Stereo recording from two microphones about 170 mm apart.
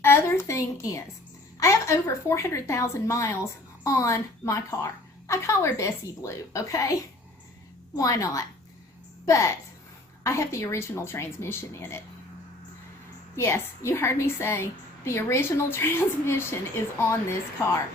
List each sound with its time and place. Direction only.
0.0 s a sound: 15° left (ahead or behind)
1.5 s a woman's voice: 15° left (ahead or behind)
13.3 s a woman's voice: 15° left (ahead or behind)